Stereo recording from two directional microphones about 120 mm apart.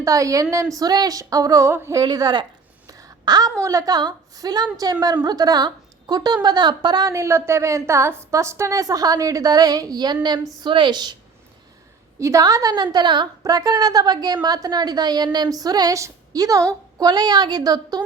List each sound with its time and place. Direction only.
0.0 s a woman's voice: 25° right (ahead or behind)
2.0 s a sound: 35° right (ahead or behind)
3.6 s a woman's voice: 30° right (ahead or behind)
12.2 s a woman's voice: 30° right (ahead or behind)